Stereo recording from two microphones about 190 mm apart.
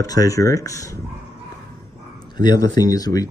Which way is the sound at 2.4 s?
20° left (ahead or behind).